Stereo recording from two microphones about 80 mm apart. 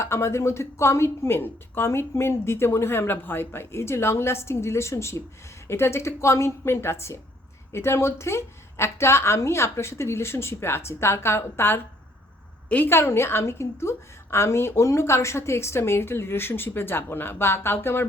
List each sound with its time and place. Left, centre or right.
0.0 s a woman's voice: left
12.6 s a woman's voice: centre
12.9 s a woman's voice: left